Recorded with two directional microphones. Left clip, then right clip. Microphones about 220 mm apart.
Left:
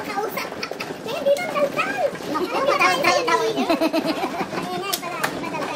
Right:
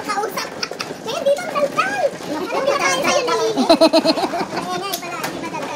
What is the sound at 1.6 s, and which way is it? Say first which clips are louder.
Children playing: right 2 dB; 25° right (ahead or behind).